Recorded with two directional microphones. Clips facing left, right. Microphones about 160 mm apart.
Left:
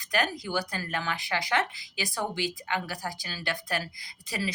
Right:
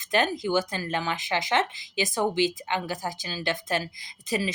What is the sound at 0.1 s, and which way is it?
Speech, 25° right (ahead or behind).